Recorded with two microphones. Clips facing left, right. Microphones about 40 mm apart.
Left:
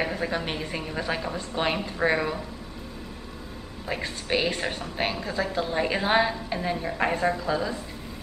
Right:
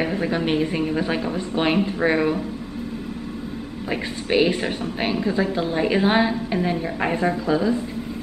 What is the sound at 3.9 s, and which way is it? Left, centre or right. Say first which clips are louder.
A woman's voice: right 5 dB; centre.